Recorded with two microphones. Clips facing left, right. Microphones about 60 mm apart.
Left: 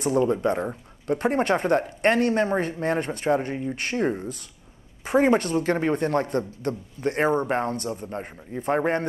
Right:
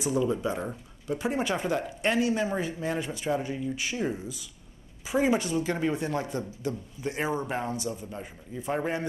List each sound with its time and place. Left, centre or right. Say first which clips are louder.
0.0 s a man's voice: left 5 dB; left
3.7 s a man's voice: left 5 dB; left